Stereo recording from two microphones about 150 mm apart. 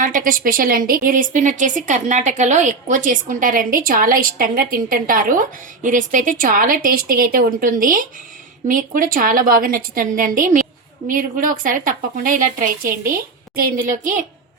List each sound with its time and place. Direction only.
0.0 s a woman's voice: 65° right (ahead or behind)